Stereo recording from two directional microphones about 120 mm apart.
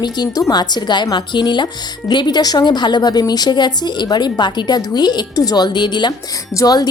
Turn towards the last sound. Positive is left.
turn(degrees=30)  # may be behind; listen again after turning